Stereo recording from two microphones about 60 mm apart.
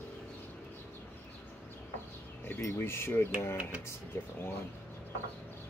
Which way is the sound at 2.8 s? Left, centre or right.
Left.